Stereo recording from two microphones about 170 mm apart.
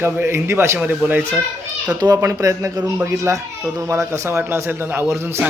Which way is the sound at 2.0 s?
20° right (ahead or behind).